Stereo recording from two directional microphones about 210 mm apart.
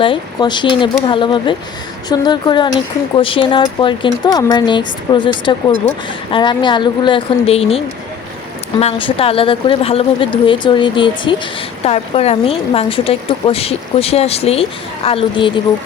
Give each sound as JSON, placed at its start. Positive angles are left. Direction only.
{"t": 0.0, "sound": "speech", "side_deg": 20}
{"t": 8.8, "sound": "speech", "side_deg": 25}